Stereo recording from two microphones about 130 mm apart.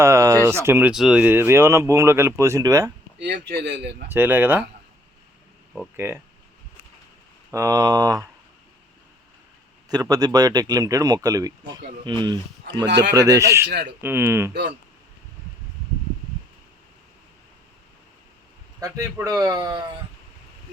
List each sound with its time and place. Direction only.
0.0 s speech: 25° right (ahead or behind)
0.9 s a man's voice: 5° right (ahead or behind); by 2.9 s 25° right (ahead or behind)
4.1 s speech: 15° right (ahead or behind)
6.0 s speech: 20° right (ahead or behind)
7.5 s a man's voice: 25° right (ahead or behind)
9.9 s a man's voice: 30° right (ahead or behind)
18.8 s a man's voice: 20° right (ahead or behind)